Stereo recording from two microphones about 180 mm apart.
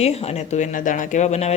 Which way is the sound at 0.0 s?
35° left (ahead or behind).